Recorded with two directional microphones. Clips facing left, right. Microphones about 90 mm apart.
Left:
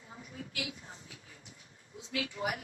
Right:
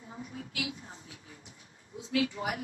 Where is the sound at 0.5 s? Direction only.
35° right (ahead or behind).